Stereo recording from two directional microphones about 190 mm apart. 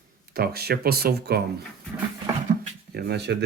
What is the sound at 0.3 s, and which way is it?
Speech, 55° right (ahead or behind).